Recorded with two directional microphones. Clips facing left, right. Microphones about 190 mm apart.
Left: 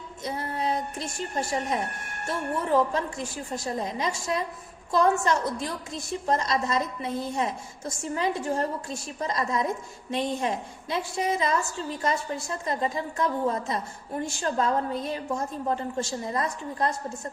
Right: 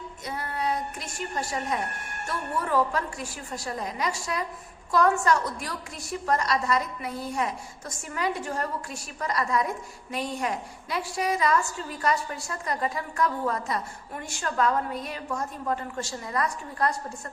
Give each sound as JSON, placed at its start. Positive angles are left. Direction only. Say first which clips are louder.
{"t": 0.3, "sound": "a woman's voice", "louder": "left 1 dB", "side_deg": 25}